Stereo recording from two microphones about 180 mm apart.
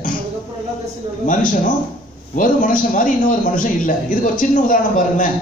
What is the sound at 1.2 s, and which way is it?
A man's voice, 45° left (ahead or behind).